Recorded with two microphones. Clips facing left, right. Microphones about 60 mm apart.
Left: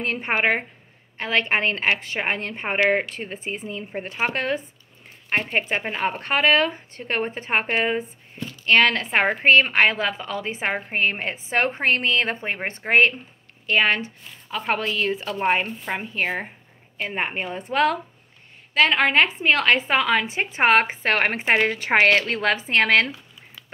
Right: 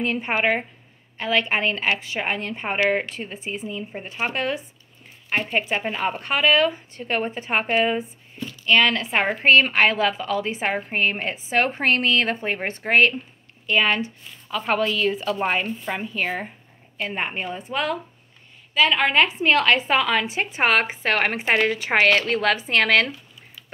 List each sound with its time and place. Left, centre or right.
0.0 s a woman's voice: left
0.3 s a woman's voice: left
3.3 s a woman's voice: left
5.5 s a woman's voice: left
17.6 s a woman's voice: left
19.0 s a woman's voice: left